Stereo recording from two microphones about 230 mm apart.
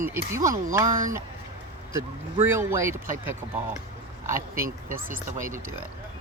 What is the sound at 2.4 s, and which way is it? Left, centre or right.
Speech, centre.